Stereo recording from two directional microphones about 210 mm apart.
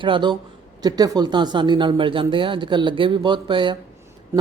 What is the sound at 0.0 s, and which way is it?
A man's voice, 25° right (ahead or behind).